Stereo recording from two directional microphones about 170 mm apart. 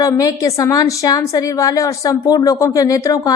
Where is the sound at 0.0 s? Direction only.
20° left (ahead or behind).